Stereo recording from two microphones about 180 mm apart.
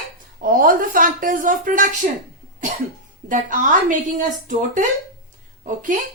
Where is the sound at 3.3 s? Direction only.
45° right (ahead or behind).